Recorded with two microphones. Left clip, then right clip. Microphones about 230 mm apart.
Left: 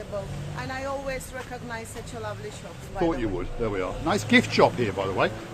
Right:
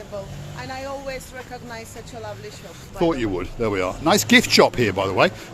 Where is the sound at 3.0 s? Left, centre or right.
Right.